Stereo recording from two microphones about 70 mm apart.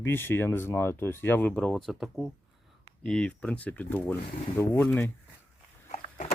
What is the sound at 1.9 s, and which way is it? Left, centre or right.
Speech, centre.